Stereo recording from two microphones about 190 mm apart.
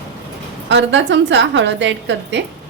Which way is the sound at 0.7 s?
70° right (ahead or behind).